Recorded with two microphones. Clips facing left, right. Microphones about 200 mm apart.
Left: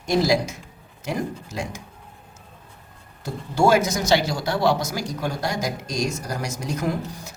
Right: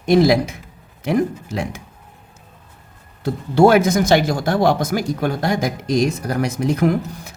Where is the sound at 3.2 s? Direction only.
60° right (ahead or behind).